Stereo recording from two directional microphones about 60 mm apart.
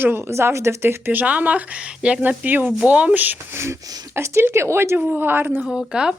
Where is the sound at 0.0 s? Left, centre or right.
Right.